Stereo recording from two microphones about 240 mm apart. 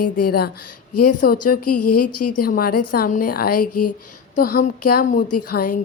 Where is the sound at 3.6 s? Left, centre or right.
Left.